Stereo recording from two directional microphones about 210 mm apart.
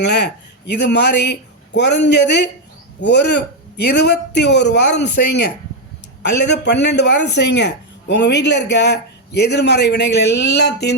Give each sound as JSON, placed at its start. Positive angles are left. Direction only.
{"t": 0.0, "sound": "a man's voice", "side_deg": 55}